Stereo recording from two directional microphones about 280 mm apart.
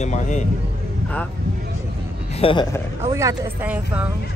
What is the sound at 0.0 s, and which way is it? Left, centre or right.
Speech, left.